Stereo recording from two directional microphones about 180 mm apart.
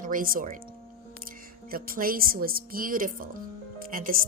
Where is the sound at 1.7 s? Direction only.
55° right (ahead or behind).